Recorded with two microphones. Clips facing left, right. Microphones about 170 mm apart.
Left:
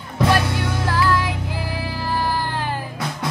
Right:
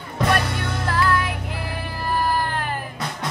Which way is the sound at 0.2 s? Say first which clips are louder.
Left 3 dB; 5° left (ahead or behind).